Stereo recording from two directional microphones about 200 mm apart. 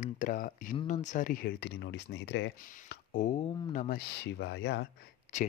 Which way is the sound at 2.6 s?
40° left (ahead or behind).